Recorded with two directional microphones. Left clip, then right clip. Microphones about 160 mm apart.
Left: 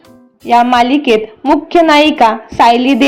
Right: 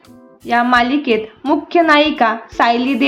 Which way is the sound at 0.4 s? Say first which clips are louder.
Left 5 dB; 15° left (ahead or behind).